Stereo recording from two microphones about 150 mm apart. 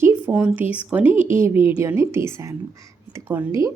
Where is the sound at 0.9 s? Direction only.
10° right (ahead or behind).